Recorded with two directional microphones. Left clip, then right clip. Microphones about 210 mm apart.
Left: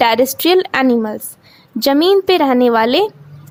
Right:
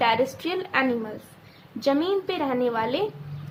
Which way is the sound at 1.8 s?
50° left (ahead or behind).